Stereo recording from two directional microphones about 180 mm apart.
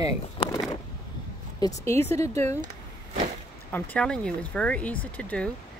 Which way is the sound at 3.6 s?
5° left (ahead or behind).